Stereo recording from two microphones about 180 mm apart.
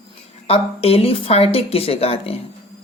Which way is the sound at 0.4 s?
35° left (ahead or behind).